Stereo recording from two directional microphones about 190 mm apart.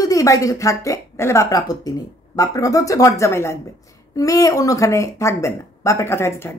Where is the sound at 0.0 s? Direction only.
15° left (ahead or behind).